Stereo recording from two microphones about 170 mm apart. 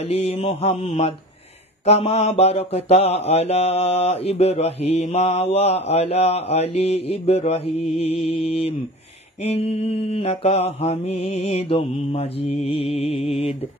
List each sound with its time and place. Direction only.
0.0 s mantra: 35° left (ahead or behind)